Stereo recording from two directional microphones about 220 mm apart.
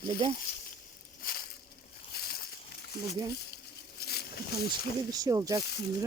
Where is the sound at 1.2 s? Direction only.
45° left (ahead or behind).